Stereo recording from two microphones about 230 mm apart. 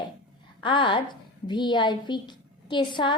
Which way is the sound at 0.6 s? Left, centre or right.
Left.